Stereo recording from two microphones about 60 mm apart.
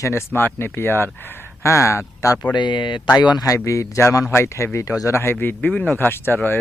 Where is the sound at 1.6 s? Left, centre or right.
Left.